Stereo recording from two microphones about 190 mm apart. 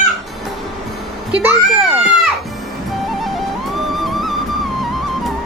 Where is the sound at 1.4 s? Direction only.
10° right (ahead or behind).